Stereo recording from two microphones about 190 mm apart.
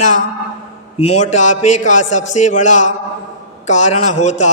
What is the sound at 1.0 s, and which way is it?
A man's voice, 40° left (ahead or behind).